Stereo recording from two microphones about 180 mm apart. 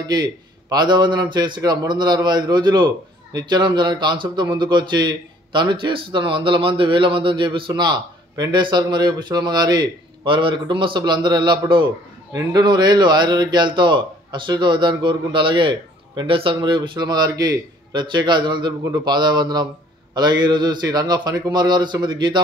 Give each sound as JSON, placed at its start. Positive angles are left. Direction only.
{"t": 0.0, "sound": "a man's voice", "side_deg": -20}